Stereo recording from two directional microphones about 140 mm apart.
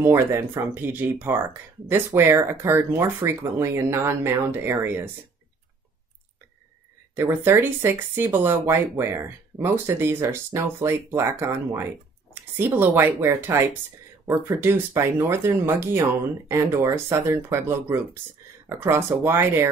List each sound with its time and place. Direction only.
0.0 s speech: 20° right (ahead or behind)
7.2 s speech: 15° right (ahead or behind)